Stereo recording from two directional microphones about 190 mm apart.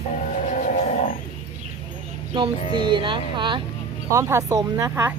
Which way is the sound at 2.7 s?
25° right (ahead or behind).